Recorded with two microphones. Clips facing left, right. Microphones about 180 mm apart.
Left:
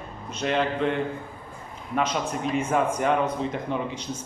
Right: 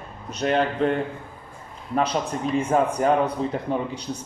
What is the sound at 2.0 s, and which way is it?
Speech, 35° right (ahead or behind).